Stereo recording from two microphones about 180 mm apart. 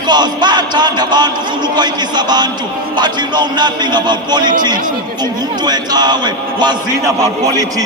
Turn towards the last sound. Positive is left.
turn(degrees=-25)  # may be behind; listen again after turning